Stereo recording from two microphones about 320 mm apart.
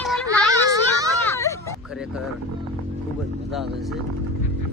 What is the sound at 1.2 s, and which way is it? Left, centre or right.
Hubbub, centre.